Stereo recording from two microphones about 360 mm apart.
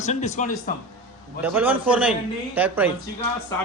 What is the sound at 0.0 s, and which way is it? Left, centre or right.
Speech, centre.